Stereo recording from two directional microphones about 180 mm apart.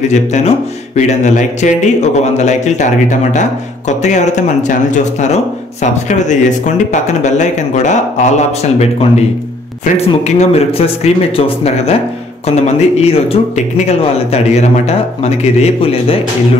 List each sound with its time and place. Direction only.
0.1 s speech: 40° left (ahead or behind)
9.9 s speech: 35° left (ahead or behind)